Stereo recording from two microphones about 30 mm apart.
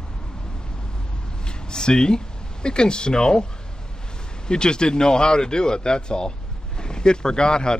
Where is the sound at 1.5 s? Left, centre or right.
Left.